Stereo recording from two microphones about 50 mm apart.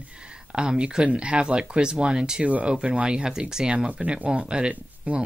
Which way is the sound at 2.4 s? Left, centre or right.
Right.